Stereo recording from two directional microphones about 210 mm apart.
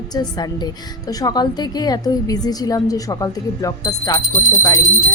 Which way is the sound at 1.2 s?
20° left (ahead or behind).